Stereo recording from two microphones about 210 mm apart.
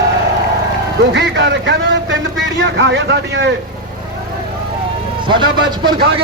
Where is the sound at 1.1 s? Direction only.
55° right (ahead or behind).